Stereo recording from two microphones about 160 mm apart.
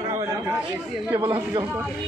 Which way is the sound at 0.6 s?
10° right (ahead or behind).